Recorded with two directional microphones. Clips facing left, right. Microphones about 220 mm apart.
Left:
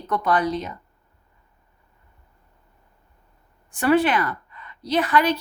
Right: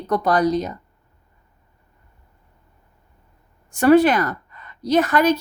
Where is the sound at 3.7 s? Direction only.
40° right (ahead or behind).